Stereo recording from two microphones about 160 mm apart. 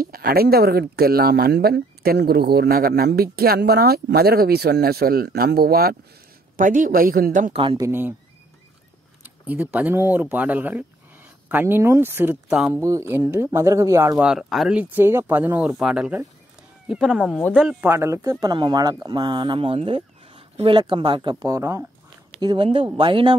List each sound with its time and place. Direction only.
0.0 s speech: 65° right (ahead or behind)
6.5 s speech: 55° right (ahead or behind)
7.5 s speech: 30° right (ahead or behind)
7.8 s speech: 15° right (ahead or behind)
9.2 s speech: 10° right (ahead or behind)
14.2 s speech: centre (ahead or behind); by 21.8 s 20° right (ahead or behind)
22.4 s speech: 30° right (ahead or behind)